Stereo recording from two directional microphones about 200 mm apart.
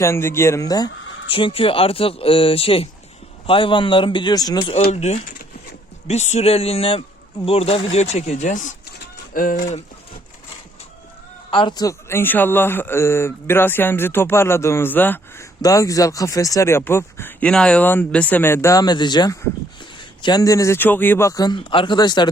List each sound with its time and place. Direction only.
0.0 s a man's voice: 15° left (ahead or behind)
4.9 s speech: 30° left (ahead or behind)
11.5 s a man's voice: 20° left (ahead or behind)